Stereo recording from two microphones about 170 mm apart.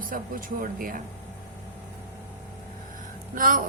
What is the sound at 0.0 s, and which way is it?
A woman's voice, 55° right (ahead or behind).